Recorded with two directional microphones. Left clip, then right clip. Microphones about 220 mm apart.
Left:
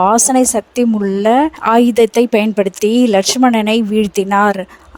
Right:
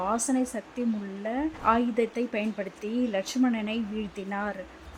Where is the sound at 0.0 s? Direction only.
50° left (ahead or behind).